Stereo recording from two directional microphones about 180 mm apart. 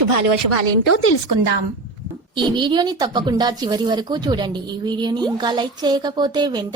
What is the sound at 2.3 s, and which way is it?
Speech, 25° right (ahead or behind).